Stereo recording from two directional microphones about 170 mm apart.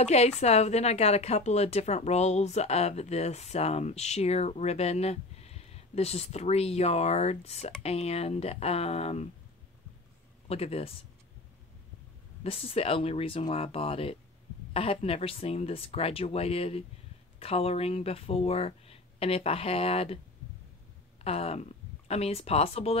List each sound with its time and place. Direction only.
0.0 s a woman's voice: 40° left (ahead or behind)
10.5 s a woman's voice: 35° left (ahead or behind)
12.4 s a woman's voice: 35° left (ahead or behind)
21.2 s speech: 35° left (ahead or behind)